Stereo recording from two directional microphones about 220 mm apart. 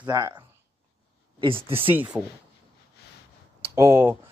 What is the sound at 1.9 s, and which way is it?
Speech, 5° right (ahead or behind).